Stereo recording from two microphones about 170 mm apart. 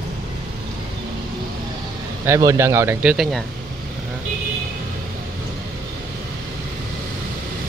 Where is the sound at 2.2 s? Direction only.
15° right (ahead or behind).